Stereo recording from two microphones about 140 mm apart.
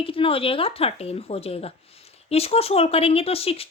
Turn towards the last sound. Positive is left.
turn(degrees=45)  # may be behind; listen again after turning